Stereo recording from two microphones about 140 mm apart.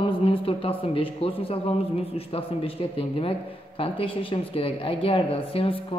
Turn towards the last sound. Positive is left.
turn(degrees=40)  # may be behind; listen again after turning